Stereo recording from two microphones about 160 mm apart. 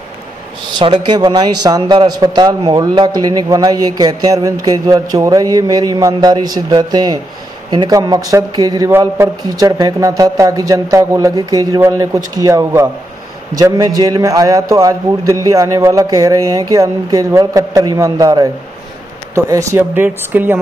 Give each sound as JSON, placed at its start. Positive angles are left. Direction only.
{"t": 0.7, "sound": "a man's voice", "side_deg": -30}